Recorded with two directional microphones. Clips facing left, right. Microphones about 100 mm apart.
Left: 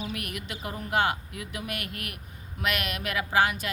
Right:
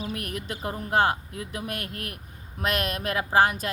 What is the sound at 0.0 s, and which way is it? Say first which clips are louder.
Speech: right 2 dB; 35° right (ahead or behind).